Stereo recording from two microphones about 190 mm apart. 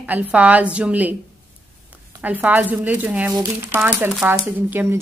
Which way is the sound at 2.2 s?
10° right (ahead or behind).